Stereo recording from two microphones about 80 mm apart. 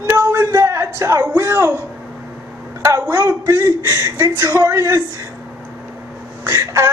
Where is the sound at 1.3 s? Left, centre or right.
Right.